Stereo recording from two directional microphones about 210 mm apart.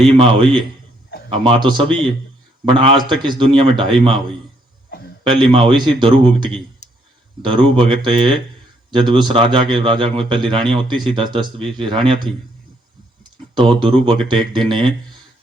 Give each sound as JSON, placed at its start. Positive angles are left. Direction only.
{"t": 0.0, "sound": "speech", "side_deg": -25}
{"t": 5.2, "sound": "speech", "side_deg": -20}
{"t": 6.8, "sound": "clicking", "side_deg": 35}
{"t": 7.4, "sound": "speech", "side_deg": -25}
{"t": 13.6, "sound": "speech", "side_deg": -25}